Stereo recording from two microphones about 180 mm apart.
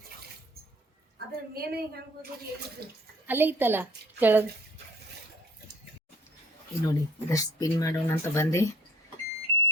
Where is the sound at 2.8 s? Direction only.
60° right (ahead or behind).